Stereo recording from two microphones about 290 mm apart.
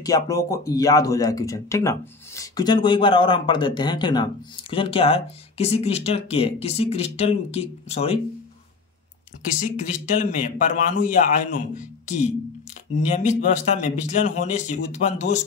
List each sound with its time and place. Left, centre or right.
0.0 s speech: centre
9.6 s a man's voice: left